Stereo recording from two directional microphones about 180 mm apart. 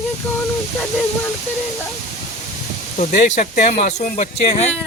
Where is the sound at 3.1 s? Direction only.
45° left (ahead or behind).